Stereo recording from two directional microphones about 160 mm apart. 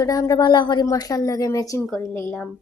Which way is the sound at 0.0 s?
20° left (ahead or behind).